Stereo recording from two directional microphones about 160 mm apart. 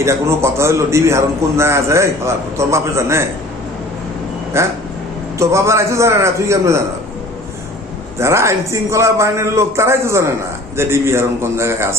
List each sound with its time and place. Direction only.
0.0 s a man's voice: 15° right (ahead or behind)
4.5 s a man's voice: 15° right (ahead or behind)
8.2 s a man's voice: 15° right (ahead or behind)